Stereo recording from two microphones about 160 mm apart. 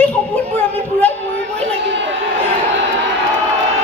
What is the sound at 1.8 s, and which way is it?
Speech, 90° right.